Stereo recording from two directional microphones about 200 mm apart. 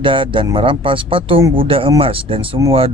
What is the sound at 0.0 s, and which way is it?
Speech, 25° right (ahead or behind).